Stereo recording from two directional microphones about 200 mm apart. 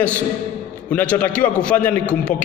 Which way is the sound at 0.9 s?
5° left (ahead or behind).